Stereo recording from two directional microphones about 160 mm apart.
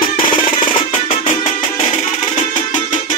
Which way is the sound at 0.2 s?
30° left (ahead or behind).